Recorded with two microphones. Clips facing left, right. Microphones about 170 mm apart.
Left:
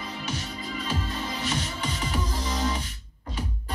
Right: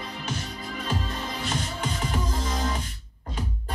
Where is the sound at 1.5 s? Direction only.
45° right (ahead or behind).